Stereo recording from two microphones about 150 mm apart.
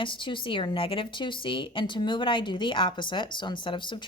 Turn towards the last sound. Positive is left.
turn(degrees=30)  # may be behind; listen again after turning